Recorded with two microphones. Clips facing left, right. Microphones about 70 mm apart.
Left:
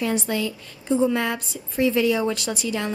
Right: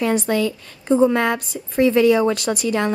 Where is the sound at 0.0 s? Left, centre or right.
Right.